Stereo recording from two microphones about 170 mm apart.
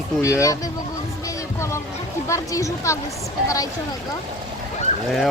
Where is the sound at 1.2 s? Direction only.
15° left (ahead or behind).